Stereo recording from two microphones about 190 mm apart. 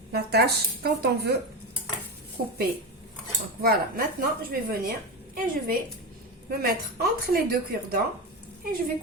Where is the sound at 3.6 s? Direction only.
50° right (ahead or behind).